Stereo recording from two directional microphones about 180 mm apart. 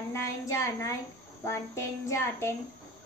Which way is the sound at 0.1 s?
15° left (ahead or behind).